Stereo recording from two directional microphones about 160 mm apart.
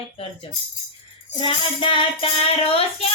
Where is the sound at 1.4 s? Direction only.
30° left (ahead or behind).